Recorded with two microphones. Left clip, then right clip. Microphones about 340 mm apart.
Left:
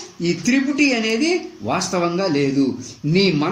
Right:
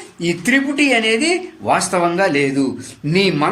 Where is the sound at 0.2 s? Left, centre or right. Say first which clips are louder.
Right 3 dB; right.